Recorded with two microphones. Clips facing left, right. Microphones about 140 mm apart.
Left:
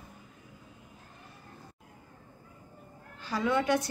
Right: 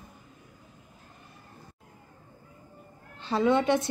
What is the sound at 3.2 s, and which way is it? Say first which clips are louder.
Speech: right 5 dB; 25° right (ahead or behind).